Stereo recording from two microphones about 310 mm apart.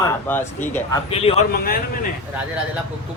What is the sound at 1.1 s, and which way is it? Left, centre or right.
Speech, centre.